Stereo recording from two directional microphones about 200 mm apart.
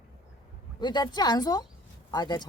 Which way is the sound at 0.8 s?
20° left (ahead or behind).